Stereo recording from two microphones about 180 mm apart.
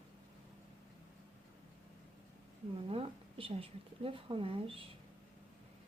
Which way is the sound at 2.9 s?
30° right (ahead or behind).